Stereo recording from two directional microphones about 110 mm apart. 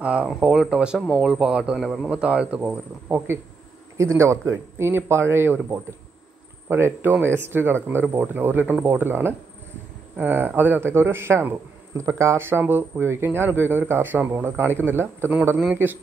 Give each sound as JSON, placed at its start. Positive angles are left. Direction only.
{"t": 0.0, "sound": "speech", "side_deg": -10}
{"t": 0.9, "sound": "speech", "side_deg": 5}
{"t": 1.2, "sound": "a man's voice", "side_deg": -5}